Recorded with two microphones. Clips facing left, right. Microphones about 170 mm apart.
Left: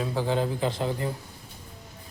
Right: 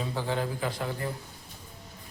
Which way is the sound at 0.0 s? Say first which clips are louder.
Left 4 dB; 10° left (ahead or behind).